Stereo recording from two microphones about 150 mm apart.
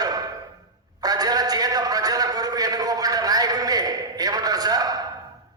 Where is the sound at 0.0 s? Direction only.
25° right (ahead or behind).